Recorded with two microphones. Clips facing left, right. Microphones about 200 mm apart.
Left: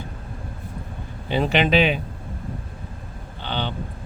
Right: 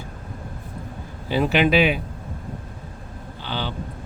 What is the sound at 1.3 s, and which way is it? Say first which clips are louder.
Speech: right 1 dB; 5° right (ahead or behind).